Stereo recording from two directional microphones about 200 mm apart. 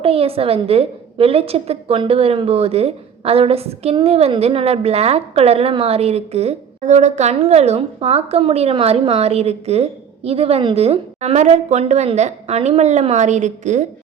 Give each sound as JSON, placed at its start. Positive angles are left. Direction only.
{"t": 0.0, "sound": "a woman's voice", "side_deg": -30}